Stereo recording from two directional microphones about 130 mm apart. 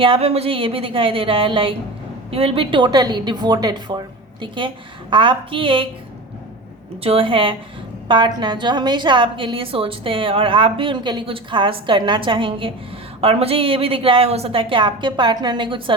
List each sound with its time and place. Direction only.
0.0 s a woman's voice: 45° right (ahead or behind)
7.0 s a woman's voice: 45° right (ahead or behind)